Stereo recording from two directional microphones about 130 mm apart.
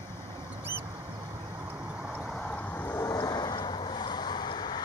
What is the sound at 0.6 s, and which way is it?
Duck, 15° right (ahead or behind).